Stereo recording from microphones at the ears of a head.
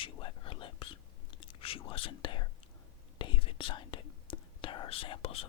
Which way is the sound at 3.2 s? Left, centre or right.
Left.